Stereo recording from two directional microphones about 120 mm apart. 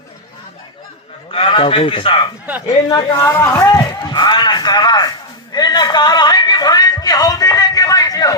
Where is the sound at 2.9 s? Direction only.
30° left (ahead or behind).